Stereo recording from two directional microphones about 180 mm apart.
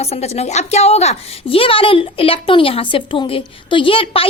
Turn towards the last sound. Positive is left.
turn(degrees=30)  # may be behind; listen again after turning